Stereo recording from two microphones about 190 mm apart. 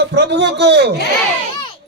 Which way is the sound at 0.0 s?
65° right (ahead or behind).